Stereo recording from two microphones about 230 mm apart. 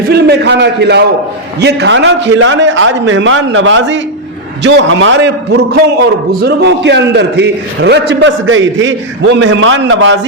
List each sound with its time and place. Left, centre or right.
0.1 s a man's voice: right